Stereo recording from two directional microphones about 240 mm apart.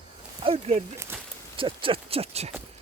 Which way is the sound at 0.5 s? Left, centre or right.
Right.